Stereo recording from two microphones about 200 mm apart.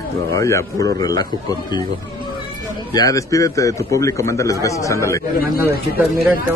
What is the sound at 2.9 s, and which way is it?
Speech, 15° left (ahead or behind).